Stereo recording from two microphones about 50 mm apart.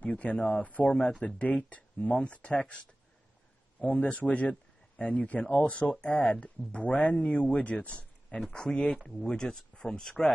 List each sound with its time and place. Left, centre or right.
0.1 s speech: left
3.8 s speech: left
8.5 s speech: centre